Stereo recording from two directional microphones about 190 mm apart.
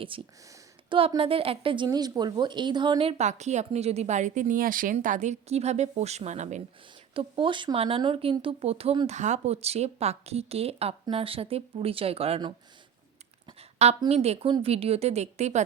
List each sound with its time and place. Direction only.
0.1 s speech: 25° right (ahead or behind)
7.1 s speech: 25° right (ahead or behind)
13.6 s speech: 30° right (ahead or behind)